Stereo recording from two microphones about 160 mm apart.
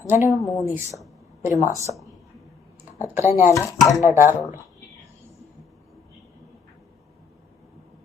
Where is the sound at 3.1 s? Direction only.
15° right (ahead or behind).